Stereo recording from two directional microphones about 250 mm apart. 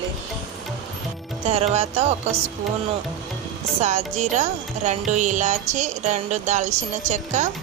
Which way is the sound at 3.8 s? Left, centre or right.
Right.